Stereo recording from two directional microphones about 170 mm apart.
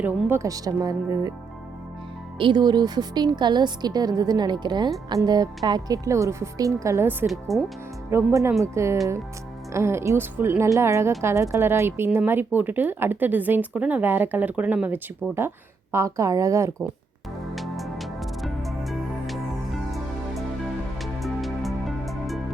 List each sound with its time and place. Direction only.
0.0 s a woman's voice: 15° right (ahead or behind)
2.4 s a woman's voice: 25° right (ahead or behind)
7.3 s speech: centre (ahead or behind)
8.1 s speech: 15° right (ahead or behind)
17.5 s music: centre (ahead or behind)